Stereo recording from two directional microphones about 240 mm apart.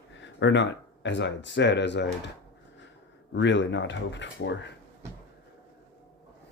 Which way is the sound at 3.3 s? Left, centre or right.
Left.